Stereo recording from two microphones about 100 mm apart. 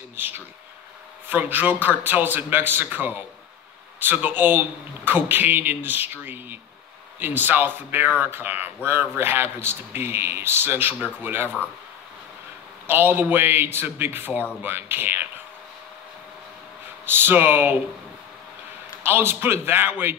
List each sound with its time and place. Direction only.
0.1 s a sound: 20° right (ahead or behind)
1.3 s a man's voice: 20° right (ahead or behind)
12.8 s a man's voice: 20° right (ahead or behind)
17.0 s a man's voice: 20° right (ahead or behind)
19.0 s a man's voice: 20° right (ahead or behind)